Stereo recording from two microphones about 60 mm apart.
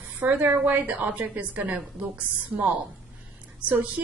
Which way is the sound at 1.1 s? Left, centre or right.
Right.